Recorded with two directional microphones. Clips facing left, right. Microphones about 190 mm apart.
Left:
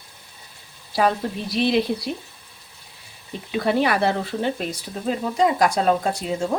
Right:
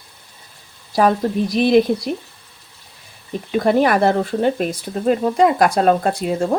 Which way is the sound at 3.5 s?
45° right (ahead or behind).